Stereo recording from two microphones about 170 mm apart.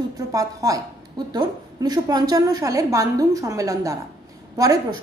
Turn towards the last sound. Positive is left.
turn(degrees=-20)  # may be behind; listen again after turning